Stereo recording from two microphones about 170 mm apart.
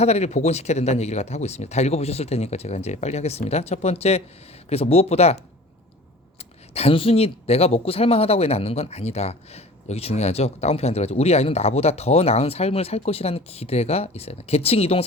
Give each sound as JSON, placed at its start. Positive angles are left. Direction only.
{"t": 0.0, "sound": "speech", "side_deg": 40}
{"t": 6.7, "sound": "speech", "side_deg": 35}